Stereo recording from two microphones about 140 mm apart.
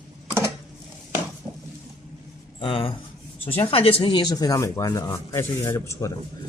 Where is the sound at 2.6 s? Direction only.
40° left (ahead or behind).